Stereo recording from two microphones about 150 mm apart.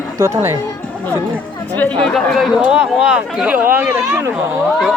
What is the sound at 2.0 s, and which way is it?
Speech, 5° left (ahead or behind).